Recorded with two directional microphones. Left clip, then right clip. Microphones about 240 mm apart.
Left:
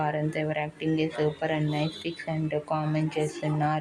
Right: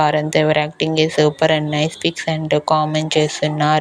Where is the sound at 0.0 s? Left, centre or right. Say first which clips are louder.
Right 13 dB; right.